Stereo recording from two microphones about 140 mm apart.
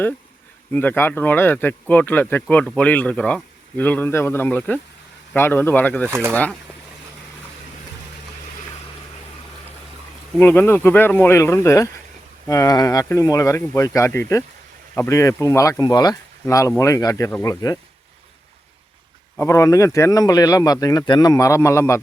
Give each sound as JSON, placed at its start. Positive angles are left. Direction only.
{"t": 0.7, "sound": "speech", "side_deg": 15}
{"t": 6.1, "sound": "speech", "side_deg": -15}
{"t": 10.3, "sound": "speech", "side_deg": 15}
{"t": 19.4, "sound": "speech", "side_deg": 20}